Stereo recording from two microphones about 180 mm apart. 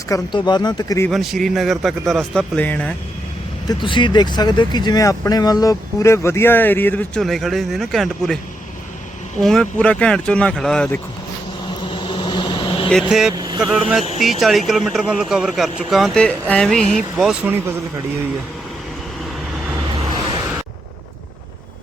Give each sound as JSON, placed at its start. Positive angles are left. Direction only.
{"t": 0.1, "sound": "speech", "side_deg": 25}
{"t": 1.1, "sound": "speech", "side_deg": 0}
{"t": 3.7, "sound": "speech", "side_deg": 25}
{"t": 9.4, "sound": "speech", "side_deg": 5}
{"t": 11.6, "sound": "vehicle", "side_deg": 25}
{"t": 12.9, "sound": "speech", "side_deg": 0}